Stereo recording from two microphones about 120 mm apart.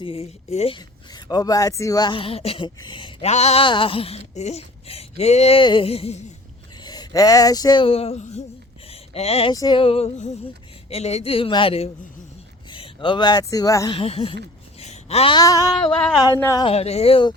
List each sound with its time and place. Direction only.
0.0 s female singing: 55° left (ahead or behind)
1.1 s speech: 35° left (ahead or behind); by 2.6 s 55° left (ahead or behind)
2.6 s speech: 40° left (ahead or behind)
3.2 s speech: 65° left (ahead or behind)
3.6 s speech: 45° left (ahead or behind)
6.8 s speech: 35° left (ahead or behind); by 8.4 s 65° left (ahead or behind)
8.9 s a sound: 60° left (ahead or behind)
9.5 s female singing: 35° left (ahead or behind); by 10.3 s 65° left (ahead or behind)
10.4 s speech: 60° left (ahead or behind); by 13.9 s 30° left (ahead or behind)
13.9 s speech: 55° left (ahead or behind)
14.8 s a sound: 60° left (ahead or behind)
15.4 s a sound: 30° left (ahead or behind)
16.0 s a sound: 5° left (ahead or behind)
16.6 s speech: 60° left (ahead or behind)